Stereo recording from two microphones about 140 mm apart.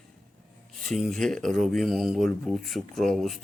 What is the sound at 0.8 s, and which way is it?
Speech, centre (ahead or behind).